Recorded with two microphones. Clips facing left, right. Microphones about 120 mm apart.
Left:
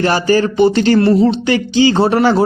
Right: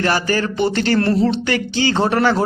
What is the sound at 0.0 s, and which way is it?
A man's voice, 20° left (ahead or behind).